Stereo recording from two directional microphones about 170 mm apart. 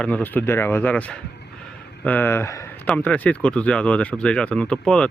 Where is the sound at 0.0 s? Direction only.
10° left (ahead or behind).